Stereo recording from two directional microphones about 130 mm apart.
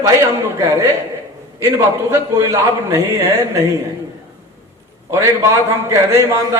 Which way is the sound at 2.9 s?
20° right (ahead or behind).